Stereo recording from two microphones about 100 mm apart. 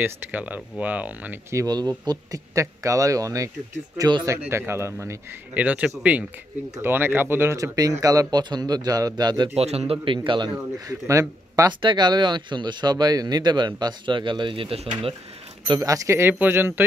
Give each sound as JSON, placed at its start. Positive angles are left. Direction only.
{"t": 0.0, "sound": "speech", "side_deg": -15}
{"t": 1.7, "sound": "a man's voice", "side_deg": -45}
{"t": 9.6, "sound": "a man's voice", "side_deg": -90}
{"t": 10.1, "sound": "speech", "side_deg": -50}
{"t": 10.9, "sound": "speech", "side_deg": -35}
{"t": 11.8, "sound": "speech", "side_deg": -50}
{"t": 15.8, "sound": "a man's voice", "side_deg": -30}